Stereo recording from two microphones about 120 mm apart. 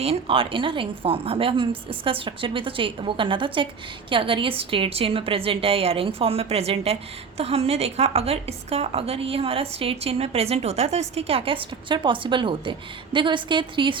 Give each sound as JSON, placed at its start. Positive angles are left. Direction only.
{"t": 0.0, "sound": "a woman's voice", "side_deg": -55}